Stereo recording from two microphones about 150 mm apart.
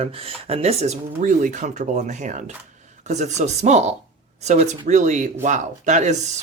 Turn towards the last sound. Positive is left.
turn(degrees=-50)  # may be behind; listen again after turning